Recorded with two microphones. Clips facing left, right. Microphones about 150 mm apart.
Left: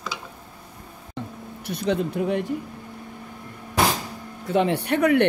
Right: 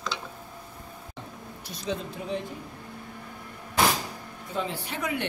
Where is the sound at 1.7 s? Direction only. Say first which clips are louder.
Left 9 dB; 65° left (ahead or behind).